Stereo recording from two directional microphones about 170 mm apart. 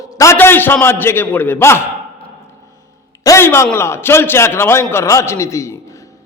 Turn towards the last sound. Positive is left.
turn(degrees=15)  # may be behind; listen again after turning